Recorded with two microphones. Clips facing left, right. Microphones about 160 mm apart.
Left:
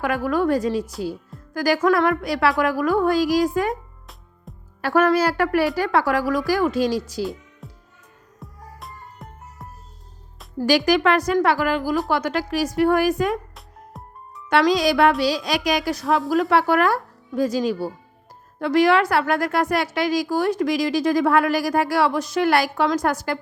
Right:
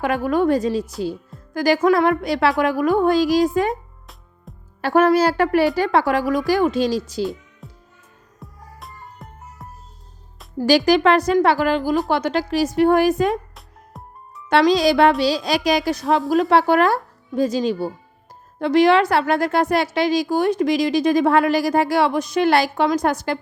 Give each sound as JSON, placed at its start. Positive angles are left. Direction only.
{"t": 0.0, "sound": "a woman's voice", "side_deg": -25}
{"t": 4.5, "sound": "music", "side_deg": 0}
{"t": 4.8, "sound": "a woman's voice", "side_deg": -20}
{"t": 7.6, "sound": "music", "side_deg": 0}
{"t": 10.7, "sound": "a woman's voice", "side_deg": -30}
{"t": 13.6, "sound": "music", "side_deg": 0}
{"t": 14.7, "sound": "a woman's voice", "side_deg": -30}